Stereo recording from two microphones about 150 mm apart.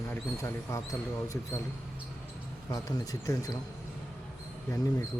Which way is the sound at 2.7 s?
25° left (ahead or behind).